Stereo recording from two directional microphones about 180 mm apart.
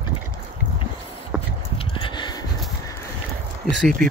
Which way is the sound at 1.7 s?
25° left (ahead or behind).